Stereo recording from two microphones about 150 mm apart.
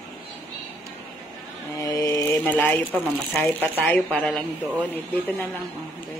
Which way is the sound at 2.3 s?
10° left (ahead or behind).